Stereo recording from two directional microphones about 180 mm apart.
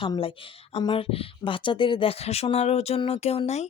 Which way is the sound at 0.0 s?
30° left (ahead or behind).